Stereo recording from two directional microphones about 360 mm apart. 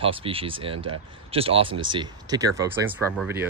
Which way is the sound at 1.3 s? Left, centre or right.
Centre.